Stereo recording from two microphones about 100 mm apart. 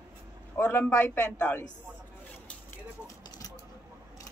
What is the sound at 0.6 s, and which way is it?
A man's voice, 20° left (ahead or behind).